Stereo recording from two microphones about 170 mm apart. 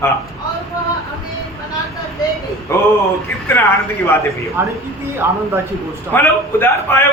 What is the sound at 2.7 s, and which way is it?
Speech, 15° left (ahead or behind).